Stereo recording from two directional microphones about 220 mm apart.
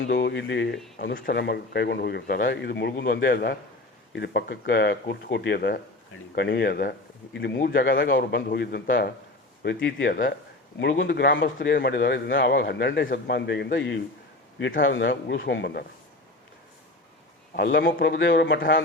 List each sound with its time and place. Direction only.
0.0 s a man's voice: 50° left (ahead or behind)
17.6 s a man's voice: 45° left (ahead or behind)